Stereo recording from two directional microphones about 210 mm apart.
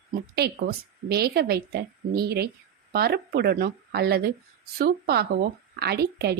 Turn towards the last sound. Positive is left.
turn(degrees=-50)  # may be behind; listen again after turning